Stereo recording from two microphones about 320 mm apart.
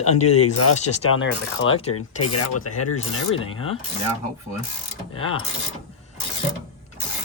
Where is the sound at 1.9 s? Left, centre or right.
Left.